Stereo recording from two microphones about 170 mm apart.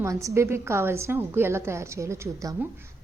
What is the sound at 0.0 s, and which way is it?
A woman's voice, 20° right (ahead or behind).